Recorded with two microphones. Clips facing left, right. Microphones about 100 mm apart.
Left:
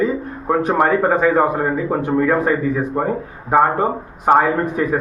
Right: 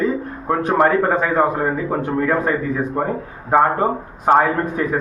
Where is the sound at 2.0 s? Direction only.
5° left (ahead or behind).